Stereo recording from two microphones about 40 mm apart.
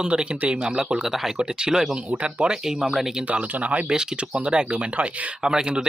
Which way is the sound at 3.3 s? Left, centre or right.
Right.